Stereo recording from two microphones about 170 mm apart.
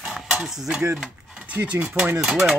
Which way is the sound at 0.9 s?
5° right (ahead or behind).